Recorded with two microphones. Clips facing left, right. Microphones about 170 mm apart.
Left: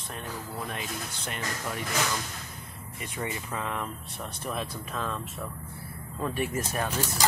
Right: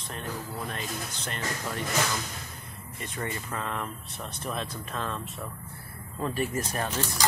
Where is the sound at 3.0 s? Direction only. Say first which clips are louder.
Even; 10° left (ahead or behind).